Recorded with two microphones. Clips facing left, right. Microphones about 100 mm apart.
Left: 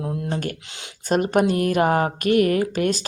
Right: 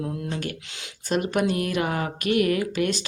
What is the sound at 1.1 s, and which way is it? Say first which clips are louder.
Speech: left 4 dB; 45° left (ahead or behind).